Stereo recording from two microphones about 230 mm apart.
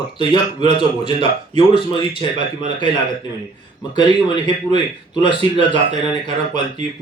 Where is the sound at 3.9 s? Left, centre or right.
Left.